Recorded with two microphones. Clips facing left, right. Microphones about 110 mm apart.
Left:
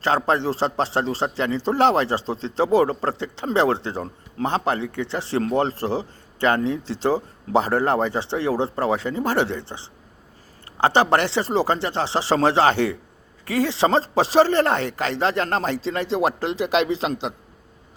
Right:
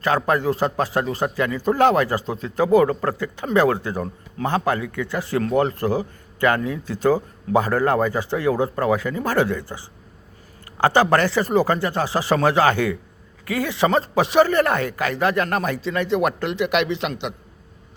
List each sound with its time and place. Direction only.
0.2 s speech: 25° left (ahead or behind)